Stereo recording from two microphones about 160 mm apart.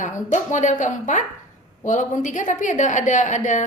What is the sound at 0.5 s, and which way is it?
A woman's voice, 50° left (ahead or behind).